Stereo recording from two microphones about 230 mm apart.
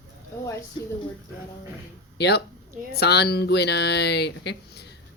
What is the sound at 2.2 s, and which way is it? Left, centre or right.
Speech, left.